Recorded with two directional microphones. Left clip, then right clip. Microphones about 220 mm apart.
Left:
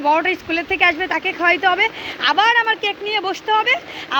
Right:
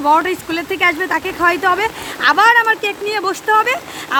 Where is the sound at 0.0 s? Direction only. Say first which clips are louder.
Right 3 dB; 20° right (ahead or behind).